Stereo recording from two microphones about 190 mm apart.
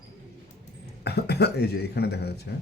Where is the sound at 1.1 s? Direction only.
60° left (ahead or behind).